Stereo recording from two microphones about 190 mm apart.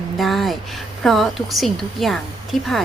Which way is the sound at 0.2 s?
Centre (ahead or behind).